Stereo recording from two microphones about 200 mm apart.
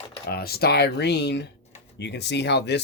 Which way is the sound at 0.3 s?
50° left (ahead or behind).